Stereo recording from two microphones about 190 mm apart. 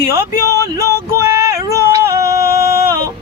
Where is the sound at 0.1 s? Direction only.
15° right (ahead or behind).